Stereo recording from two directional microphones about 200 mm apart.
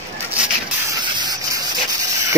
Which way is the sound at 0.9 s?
20° right (ahead or behind).